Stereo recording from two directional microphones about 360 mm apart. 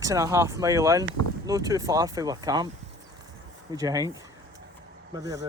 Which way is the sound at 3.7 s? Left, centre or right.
Centre.